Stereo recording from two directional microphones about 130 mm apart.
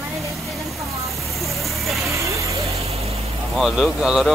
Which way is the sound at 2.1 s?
25° right (ahead or behind).